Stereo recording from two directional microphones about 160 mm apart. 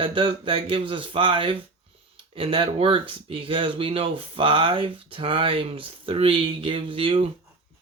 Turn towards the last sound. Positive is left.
turn(degrees=-35)  # may be behind; listen again after turning